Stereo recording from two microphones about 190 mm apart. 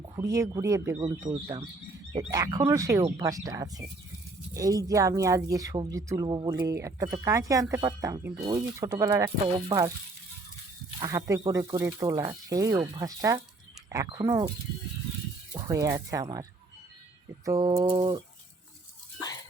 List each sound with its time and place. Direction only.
0.2 s a woman's voice: 15° right (ahead or behind)
11.0 s a woman's voice: 20° right (ahead or behind)
15.5 s speech: 20° right (ahead or behind)
17.4 s speech: 20° right (ahead or behind)